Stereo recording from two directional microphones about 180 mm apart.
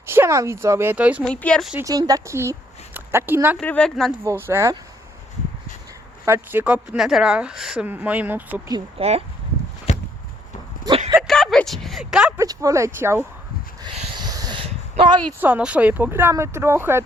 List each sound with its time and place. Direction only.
0.0 s speech: 15° right (ahead or behind)
1.2 s speech: 5° left (ahead or behind)
1.8 s speech: 20° right (ahead or behind)
3.6 s speech: 5° left (ahead or behind)
4.2 s speech: 15° right (ahead or behind)
6.2 s speech: 10° right (ahead or behind)
8.7 s speech: 35° right (ahead or behind)
9.9 s walk: 35° left (ahead or behind)
11.2 s a sound: centre (ahead or behind)
12.4 s speech: 20° right (ahead or behind)
13.8 s a sound: 30° right (ahead or behind)
15.4 s speech: 10° right (ahead or behind)